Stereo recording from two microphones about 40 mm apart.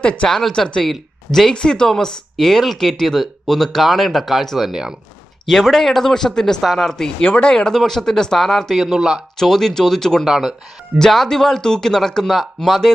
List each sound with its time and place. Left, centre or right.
0.0 s speech: left
0.3 s speech: centre
7.2 s speech: left
7.9 s speech: centre
8.7 s speech: centre
9.4 s speech: centre
10.2 s speech: centre
10.9 s speech: centre